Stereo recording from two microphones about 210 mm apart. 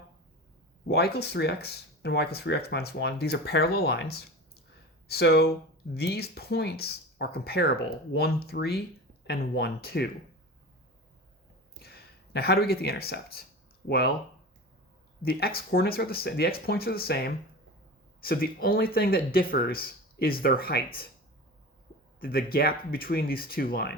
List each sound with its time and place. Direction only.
0.9 s speech: 50° left (ahead or behind)
11.8 s speech: 50° left (ahead or behind)
15.2 s speech: 45° left (ahead or behind)
22.2 s speech: 45° left (ahead or behind)